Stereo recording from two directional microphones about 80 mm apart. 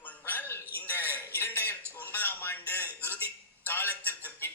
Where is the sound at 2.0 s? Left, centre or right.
Left.